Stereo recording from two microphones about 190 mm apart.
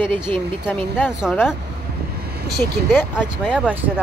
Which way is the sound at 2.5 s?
10° left (ahead or behind).